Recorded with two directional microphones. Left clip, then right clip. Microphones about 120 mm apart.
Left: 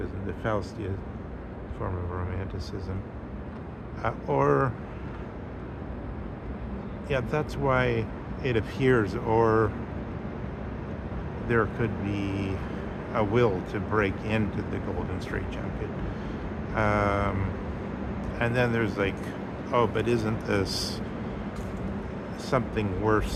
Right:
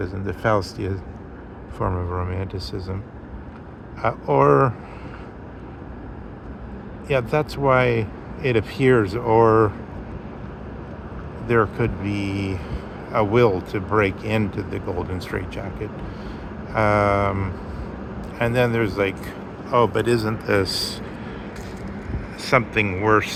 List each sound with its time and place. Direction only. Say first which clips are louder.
0.0 s speech: right 8 dB; 75° right (ahead or behind)
1.8 s speech: right 9 dB; 55° right (ahead or behind)
4.0 s speech: right 8 dB; 60° right (ahead or behind)
7.1 s speech: right 8 dB; 60° right (ahead or behind)
11.4 s speech: right 7 dB; 55° right (ahead or behind); by 21.0 s 25° right (ahead or behind)
22.4 s speech: right 9 dB; 20° right (ahead or behind)